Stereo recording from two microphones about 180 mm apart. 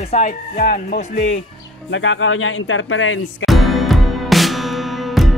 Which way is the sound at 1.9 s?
90° left.